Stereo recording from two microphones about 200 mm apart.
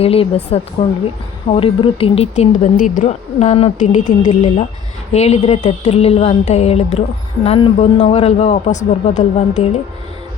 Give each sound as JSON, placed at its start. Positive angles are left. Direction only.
{"t": 0.0, "sound": "a woman's voice", "side_deg": 30}